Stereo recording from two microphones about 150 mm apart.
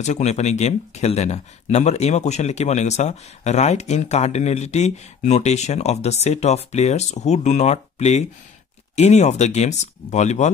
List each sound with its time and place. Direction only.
0.0 s speech: 50° left (ahead or behind)